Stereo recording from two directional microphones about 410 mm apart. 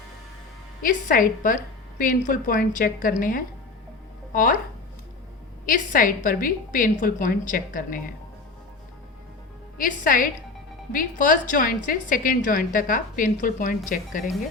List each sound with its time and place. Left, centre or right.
0.8 s a woman's voice: centre
5.6 s a woman's voice: centre
9.7 s a woman's voice: centre